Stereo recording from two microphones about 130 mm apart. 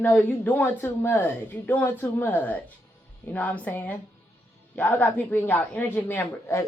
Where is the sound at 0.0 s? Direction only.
15° left (ahead or behind).